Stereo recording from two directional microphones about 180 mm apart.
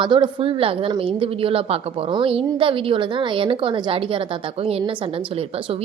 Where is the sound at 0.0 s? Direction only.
25° right (ahead or behind).